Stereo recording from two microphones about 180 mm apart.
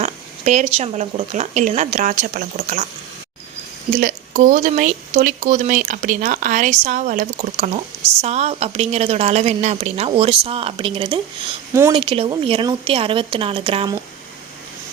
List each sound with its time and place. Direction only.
0.0 s speech: 40° right (ahead or behind)
3.9 s a woman's voice: 45° right (ahead or behind); by 11.2 s 30° right (ahead or behind)
11.7 s speech: 15° right (ahead or behind)
11.9 s a woman's voice: 30° right (ahead or behind)